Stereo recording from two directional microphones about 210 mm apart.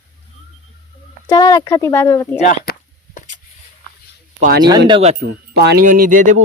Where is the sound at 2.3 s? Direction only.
40° left (ahead or behind).